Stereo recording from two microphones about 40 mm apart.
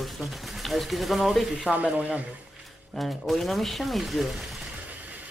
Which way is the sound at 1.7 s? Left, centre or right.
Right.